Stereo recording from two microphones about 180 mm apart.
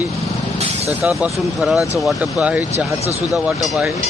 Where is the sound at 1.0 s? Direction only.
5° right (ahead or behind).